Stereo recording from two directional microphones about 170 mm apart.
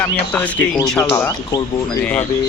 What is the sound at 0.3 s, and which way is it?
Speech, 10° left (ahead or behind).